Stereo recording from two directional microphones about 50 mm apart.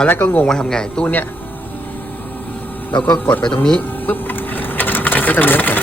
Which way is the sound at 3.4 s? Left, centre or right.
Centre.